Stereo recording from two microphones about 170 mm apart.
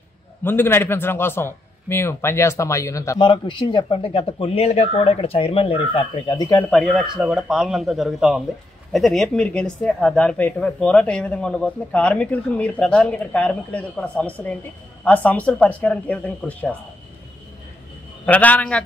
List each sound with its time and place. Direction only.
0.4 s a man's voice: 15° left (ahead or behind)
6.7 s speech: centre (ahead or behind)
18.2 s speech: 10° left (ahead or behind)